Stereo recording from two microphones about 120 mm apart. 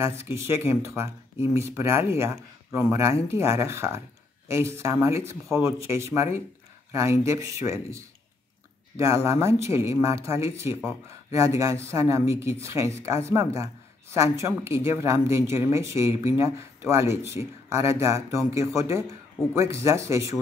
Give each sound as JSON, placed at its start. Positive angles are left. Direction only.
{"t": 0.0, "sound": "speech", "side_deg": -20}